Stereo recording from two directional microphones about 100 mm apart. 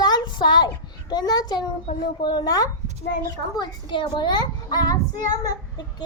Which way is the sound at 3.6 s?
55° left (ahead or behind).